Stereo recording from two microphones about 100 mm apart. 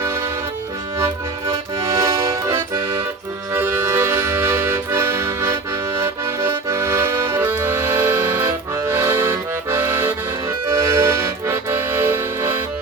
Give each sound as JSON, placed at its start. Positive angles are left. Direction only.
{"t": 0.9, "sound": "accordion", "side_deg": -30}
{"t": 3.5, "sound": "accordion", "side_deg": -20}